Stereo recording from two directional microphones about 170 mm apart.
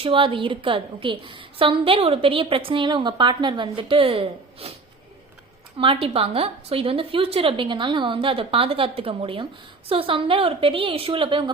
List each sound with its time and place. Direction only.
0.0 s a woman's voice: 30° right (ahead or behind)
5.8 s a woman's voice: 35° right (ahead or behind)